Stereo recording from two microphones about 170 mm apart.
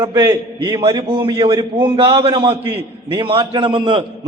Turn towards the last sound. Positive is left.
turn(degrees=-30)  # may be behind; listen again after turning